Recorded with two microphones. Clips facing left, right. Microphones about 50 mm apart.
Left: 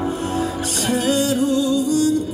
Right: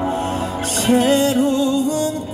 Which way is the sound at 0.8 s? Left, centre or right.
Right.